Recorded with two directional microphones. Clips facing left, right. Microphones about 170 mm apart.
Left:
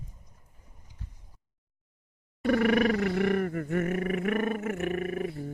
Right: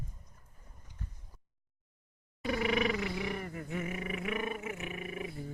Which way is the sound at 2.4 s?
55° left (ahead or behind).